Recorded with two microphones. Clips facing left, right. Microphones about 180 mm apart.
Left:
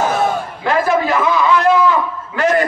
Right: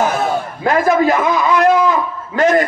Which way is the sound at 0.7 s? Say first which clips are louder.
Right 3 dB; 45° right (ahead or behind).